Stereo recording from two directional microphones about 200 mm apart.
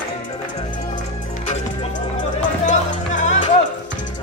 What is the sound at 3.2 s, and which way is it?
Music, 40° left (ahead or behind).